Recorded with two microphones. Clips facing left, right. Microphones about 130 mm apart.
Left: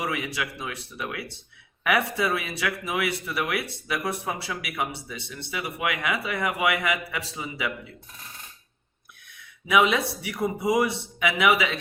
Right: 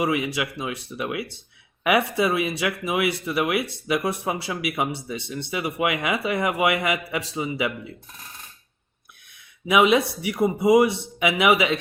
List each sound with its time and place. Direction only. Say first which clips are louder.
0.0 s speech: right 6 dB; 20° right (ahead or behind)
9.6 s speech: right 4 dB; 20° right (ahead or behind)